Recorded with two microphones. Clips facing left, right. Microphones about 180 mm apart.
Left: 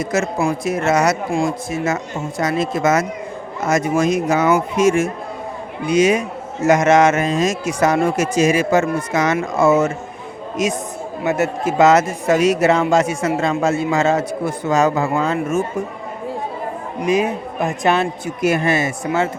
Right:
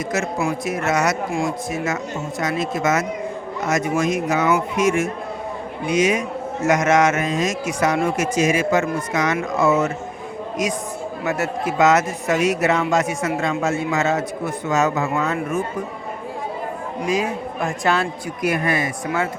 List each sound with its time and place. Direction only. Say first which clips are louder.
0.3 s a man's voice: left 3 dB; 30° left (ahead or behind)
11.2 s a man's voice: left 5 dB; 20° left (ahead or behind)
11.8 s speech: left 4 dB; 30° left (ahead or behind)
17.1 s a man's voice: left 5 dB; 20° left (ahead or behind)